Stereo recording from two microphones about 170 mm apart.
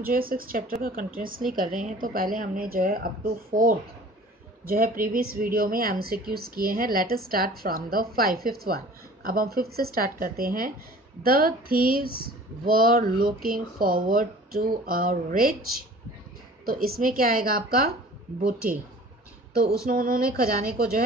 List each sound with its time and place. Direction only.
0.0 s speech: 60° right (ahead or behind)
16.6 s speech: 60° right (ahead or behind)
19.9 s speech: 55° right (ahead or behind)